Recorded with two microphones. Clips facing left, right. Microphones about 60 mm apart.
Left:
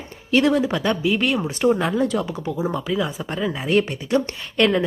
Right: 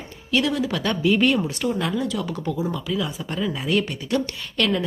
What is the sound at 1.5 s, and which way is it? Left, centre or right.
Speech, left.